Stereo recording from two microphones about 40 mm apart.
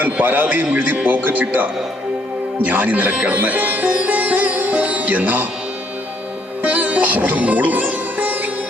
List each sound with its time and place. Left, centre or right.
0.0 s a man's voice: right
3.2 s sitar: right
6.6 s sitar: right